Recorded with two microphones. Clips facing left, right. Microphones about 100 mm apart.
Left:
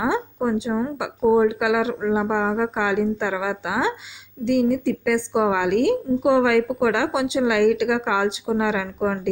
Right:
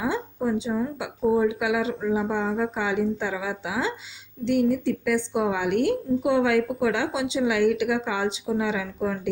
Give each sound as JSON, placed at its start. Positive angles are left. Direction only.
{"t": 0.3, "sound": "a woman's voice", "side_deg": 60}